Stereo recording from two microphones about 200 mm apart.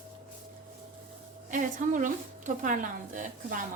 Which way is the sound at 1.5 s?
40° right (ahead or behind).